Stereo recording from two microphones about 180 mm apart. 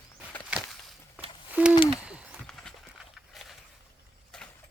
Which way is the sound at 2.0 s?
5° right (ahead or behind).